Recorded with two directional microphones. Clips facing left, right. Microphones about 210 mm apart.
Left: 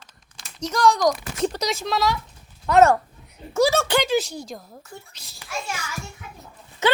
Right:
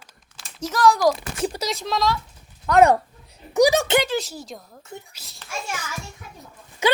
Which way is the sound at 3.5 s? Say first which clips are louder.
Right 2 dB; 15° right (ahead or behind).